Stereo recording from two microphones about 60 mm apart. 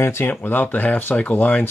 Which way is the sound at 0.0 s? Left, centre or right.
Left.